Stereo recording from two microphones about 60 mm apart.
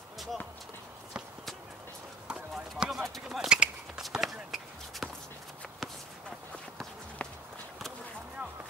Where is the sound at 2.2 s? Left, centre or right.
Centre.